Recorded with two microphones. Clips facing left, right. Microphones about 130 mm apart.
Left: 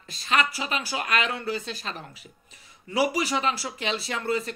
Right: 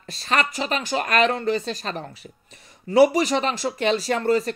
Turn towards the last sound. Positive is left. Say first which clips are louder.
# right 7 dB
turn(degrees=-40)  # may be behind; listen again after turning